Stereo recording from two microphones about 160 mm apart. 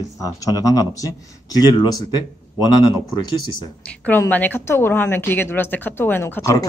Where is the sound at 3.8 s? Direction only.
10° left (ahead or behind).